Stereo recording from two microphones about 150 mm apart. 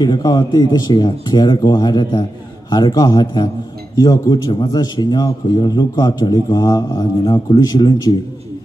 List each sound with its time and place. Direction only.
0.0 s a man's voice: 30° left (ahead or behind)